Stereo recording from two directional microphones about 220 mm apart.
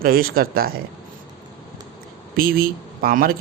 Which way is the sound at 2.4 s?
40° right (ahead or behind).